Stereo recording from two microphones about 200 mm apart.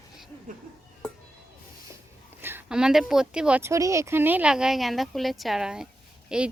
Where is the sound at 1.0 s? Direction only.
5° left (ahead or behind).